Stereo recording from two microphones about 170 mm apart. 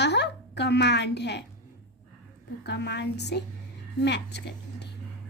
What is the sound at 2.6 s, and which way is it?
A child's voice, 80° left.